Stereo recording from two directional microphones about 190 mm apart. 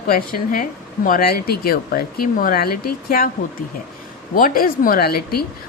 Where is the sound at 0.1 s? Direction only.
50° left (ahead or behind).